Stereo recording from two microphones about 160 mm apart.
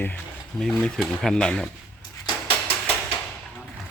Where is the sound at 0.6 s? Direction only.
5° left (ahead or behind).